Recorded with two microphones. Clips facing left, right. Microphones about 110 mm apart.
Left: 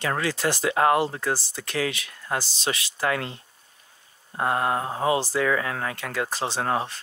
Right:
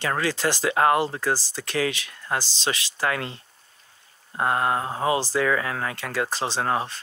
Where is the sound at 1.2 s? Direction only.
80° right.